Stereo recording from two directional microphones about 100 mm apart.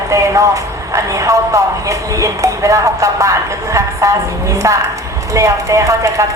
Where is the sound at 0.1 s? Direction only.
35° right (ahead or behind).